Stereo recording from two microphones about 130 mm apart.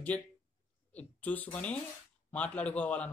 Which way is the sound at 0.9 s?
10° left (ahead or behind).